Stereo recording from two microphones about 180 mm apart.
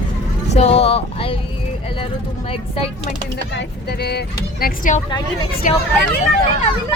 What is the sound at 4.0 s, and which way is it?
Speech, 65° left (ahead or behind).